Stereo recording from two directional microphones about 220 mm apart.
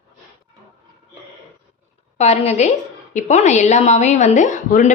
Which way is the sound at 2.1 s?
30° left (ahead or behind).